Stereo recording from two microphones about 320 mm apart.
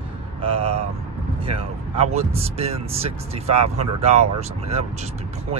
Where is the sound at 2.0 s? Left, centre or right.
Centre.